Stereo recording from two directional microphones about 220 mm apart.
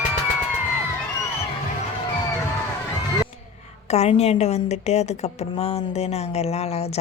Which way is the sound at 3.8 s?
30° left (ahead or behind).